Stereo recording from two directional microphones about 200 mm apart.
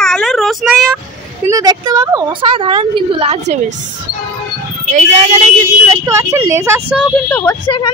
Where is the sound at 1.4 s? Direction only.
15° right (ahead or behind).